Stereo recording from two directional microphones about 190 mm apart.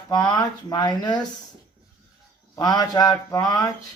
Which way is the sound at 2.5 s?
20° left (ahead or behind).